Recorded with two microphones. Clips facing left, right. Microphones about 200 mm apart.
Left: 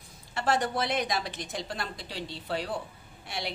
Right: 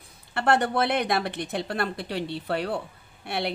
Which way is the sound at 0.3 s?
60° right (ahead or behind).